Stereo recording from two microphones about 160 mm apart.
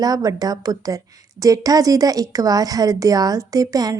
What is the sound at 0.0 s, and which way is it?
A woman's voice, 25° right (ahead or behind).